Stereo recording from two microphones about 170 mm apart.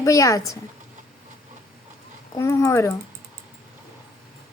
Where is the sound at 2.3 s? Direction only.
20° left (ahead or behind).